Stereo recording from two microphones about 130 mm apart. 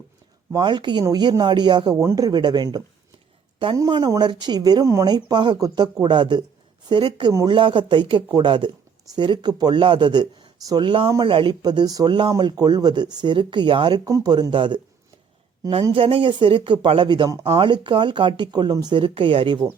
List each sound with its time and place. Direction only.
0.5 s speech: 35° right (ahead or behind)
16.0 s speech: 45° right (ahead or behind)